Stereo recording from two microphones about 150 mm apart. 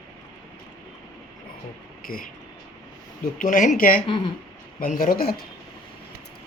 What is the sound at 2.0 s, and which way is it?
Speech, 70° left (ahead or behind).